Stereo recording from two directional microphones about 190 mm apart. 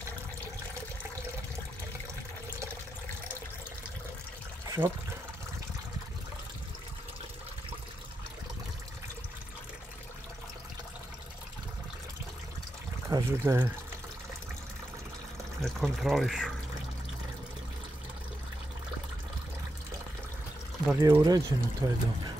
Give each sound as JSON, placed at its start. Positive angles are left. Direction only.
{"t": 4.8, "sound": "speech", "side_deg": -15}
{"t": 13.1, "sound": "speech", "side_deg": -15}
{"t": 15.6, "sound": "speech", "side_deg": 0}
{"t": 20.9, "sound": "speech", "side_deg": -15}